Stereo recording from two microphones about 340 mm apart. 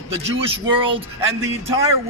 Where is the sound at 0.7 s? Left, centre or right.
Centre.